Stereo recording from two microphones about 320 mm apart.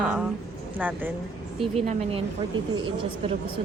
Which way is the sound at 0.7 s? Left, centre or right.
Centre.